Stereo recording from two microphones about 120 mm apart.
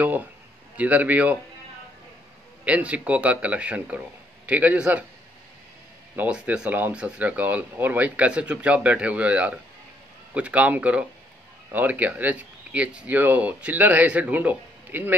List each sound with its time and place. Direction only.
0.7 s speech: 15° right (ahead or behind)
2.6 s speech: 10° right (ahead or behind)
6.1 s speech: 10° right (ahead or behind)